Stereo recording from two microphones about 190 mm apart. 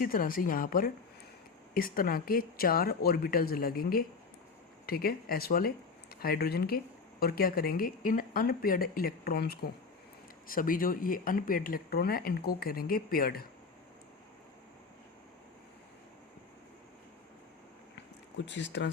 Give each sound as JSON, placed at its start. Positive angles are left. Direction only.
{"t": 0.0, "sound": "speech", "side_deg": 45}
{"t": 18.4, "sound": "speech", "side_deg": 70}